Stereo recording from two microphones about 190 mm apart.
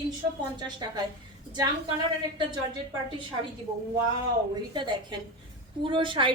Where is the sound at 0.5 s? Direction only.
20° right (ahead or behind).